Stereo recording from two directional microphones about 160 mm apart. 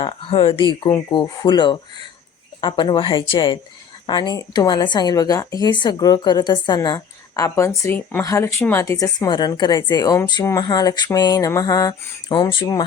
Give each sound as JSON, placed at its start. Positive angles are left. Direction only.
{"t": 0.0, "sound": "a woman's voice", "side_deg": 35}